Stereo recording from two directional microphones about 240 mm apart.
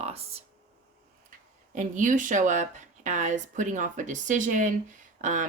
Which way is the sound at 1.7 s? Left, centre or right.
Right.